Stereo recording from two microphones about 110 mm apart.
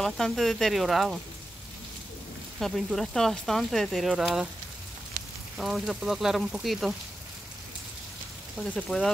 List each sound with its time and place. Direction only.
0.0 s speech: 5° left (ahead or behind)
2.6 s speech: centre (ahead or behind)
5.2 s frying: 90° right
5.6 s speech: 5° right (ahead or behind)
8.7 s speech: 5° left (ahead or behind)